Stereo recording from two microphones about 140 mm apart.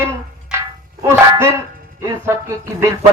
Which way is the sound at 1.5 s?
20° right (ahead or behind).